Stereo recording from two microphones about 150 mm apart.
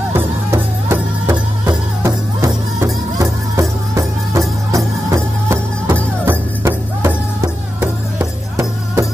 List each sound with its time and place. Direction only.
0.1 s music: 20° right (ahead or behind)